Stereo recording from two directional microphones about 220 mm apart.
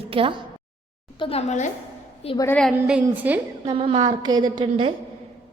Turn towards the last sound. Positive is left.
turn(degrees=-20)  # may be behind; listen again after turning